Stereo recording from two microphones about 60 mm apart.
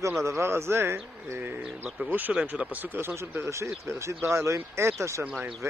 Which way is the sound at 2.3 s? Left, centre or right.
Centre.